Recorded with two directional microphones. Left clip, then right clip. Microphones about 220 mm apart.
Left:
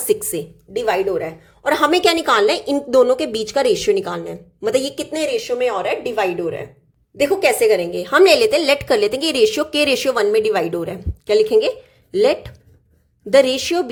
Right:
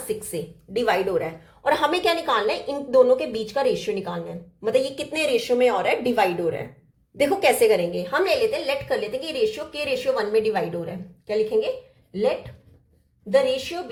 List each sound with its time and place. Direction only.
0.1 s a woman's voice: 35° left (ahead or behind)
0.7 s a woman's voice: 20° left (ahead or behind)
1.6 s a woman's voice: 30° left (ahead or behind)
5.1 s a woman's voice: 15° left (ahead or behind)
7.9 s a woman's voice: 40° left (ahead or behind); by 13.8 s 55° left (ahead or behind)